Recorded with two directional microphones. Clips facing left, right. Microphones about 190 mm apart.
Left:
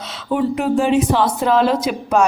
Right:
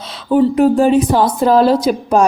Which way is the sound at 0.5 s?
40° right (ahead or behind).